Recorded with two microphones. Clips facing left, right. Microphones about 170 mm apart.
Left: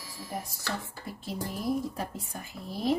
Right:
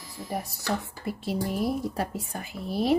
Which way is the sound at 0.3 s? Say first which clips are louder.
Right 6 dB; 65° right (ahead or behind).